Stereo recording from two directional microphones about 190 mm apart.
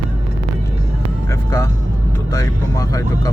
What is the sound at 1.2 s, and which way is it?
Speech, 15° left (ahead or behind).